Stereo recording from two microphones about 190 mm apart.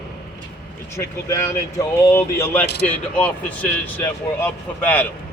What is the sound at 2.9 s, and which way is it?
Speech, 5° left (ahead or behind).